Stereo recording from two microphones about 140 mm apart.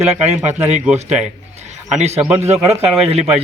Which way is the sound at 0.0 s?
50° right (ahead or behind).